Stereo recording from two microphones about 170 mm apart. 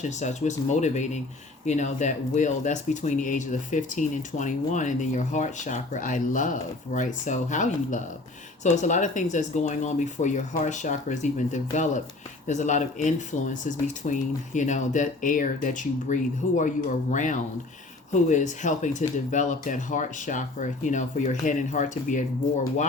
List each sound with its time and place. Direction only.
0.0 s speech: 45° left (ahead or behind)